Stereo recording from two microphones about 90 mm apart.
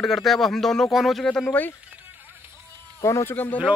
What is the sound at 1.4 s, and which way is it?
Speech, 20° left (ahead or behind).